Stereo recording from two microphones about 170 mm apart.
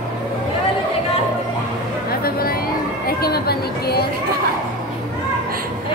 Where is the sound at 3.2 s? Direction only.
65° left (ahead or behind).